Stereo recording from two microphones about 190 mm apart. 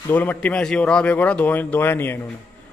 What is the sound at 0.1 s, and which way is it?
Speech, 10° left (ahead or behind).